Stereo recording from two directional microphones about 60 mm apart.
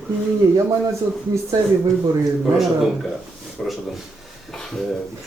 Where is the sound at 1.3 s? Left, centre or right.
Right.